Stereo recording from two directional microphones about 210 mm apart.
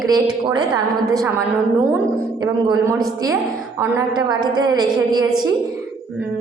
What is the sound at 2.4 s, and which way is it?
A woman's voice, 20° right (ahead or behind).